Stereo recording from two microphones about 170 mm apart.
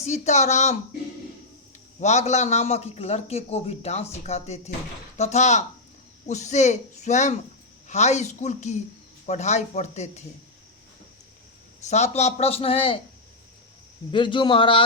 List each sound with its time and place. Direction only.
0.0 s speech: 40° left (ahead or behind)
2.0 s a man's voice: 40° left (ahead or behind)
11.8 s a man's voice: 40° left (ahead or behind)
14.1 s a man's voice: 30° left (ahead or behind)